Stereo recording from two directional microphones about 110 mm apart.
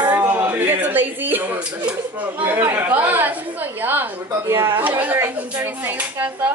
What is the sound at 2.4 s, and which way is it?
Speech, 20° right (ahead or behind).